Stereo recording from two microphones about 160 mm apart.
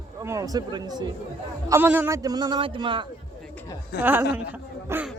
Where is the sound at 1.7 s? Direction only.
15° right (ahead or behind); by 3.1 s 30° right (ahead or behind).